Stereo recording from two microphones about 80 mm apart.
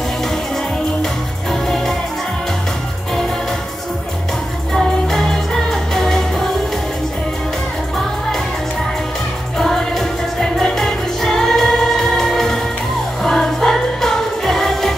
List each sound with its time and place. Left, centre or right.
1.5 s music: centre
4.7 s music: centre
9.6 s music: centre